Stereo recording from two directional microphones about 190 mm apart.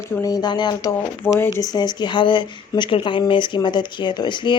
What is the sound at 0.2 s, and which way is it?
A woman's voice, 20° left (ahead or behind).